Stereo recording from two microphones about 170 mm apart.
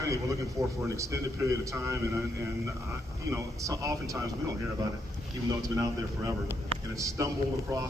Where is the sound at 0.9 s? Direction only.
20° right (ahead or behind).